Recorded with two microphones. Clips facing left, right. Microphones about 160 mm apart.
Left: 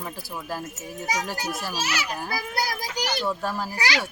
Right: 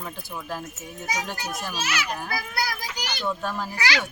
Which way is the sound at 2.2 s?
35° left (ahead or behind).